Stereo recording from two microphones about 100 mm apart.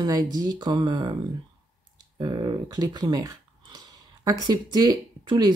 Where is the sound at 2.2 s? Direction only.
50° right (ahead or behind).